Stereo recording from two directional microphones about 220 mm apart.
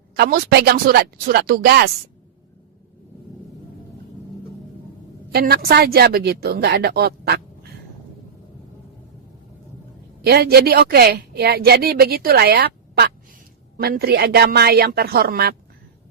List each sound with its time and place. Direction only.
0.2 s a woman's voice: 45° right (ahead or behind)
5.3 s a woman's voice: 45° right (ahead or behind)
10.2 s a woman's voice: 45° right (ahead or behind)